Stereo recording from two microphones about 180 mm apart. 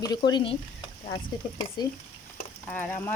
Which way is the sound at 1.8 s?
25° left (ahead or behind).